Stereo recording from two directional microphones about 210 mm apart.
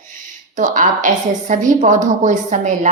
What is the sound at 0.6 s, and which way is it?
A woman's voice, 40° right (ahead or behind).